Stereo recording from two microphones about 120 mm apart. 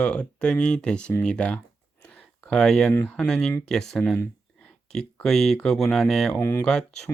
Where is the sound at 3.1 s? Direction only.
5° left (ahead or behind).